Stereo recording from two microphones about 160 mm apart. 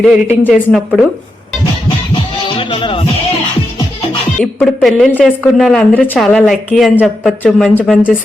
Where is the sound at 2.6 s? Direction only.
35° left (ahead or behind).